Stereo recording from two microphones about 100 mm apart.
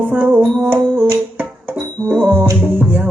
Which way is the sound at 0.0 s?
20° right (ahead or behind).